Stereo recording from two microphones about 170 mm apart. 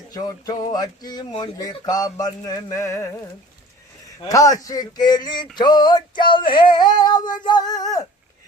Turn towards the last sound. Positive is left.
turn(degrees=20)  # may be behind; listen again after turning